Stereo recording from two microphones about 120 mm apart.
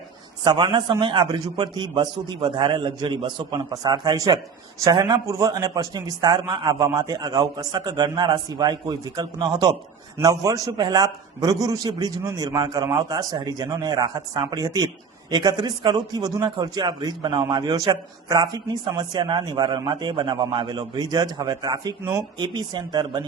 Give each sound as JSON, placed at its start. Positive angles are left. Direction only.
{"t": 0.4, "sound": "a man's voice", "side_deg": -40}